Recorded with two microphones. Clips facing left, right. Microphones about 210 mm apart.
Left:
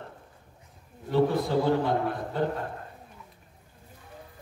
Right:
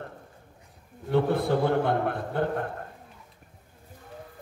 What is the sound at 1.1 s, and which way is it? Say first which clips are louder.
A man's voice: even; 55° right (ahead or behind).